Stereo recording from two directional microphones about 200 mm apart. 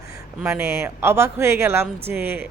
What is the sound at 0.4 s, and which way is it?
Speech, 10° right (ahead or behind).